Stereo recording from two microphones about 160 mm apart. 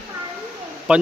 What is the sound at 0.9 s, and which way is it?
Speech, 5° right (ahead or behind).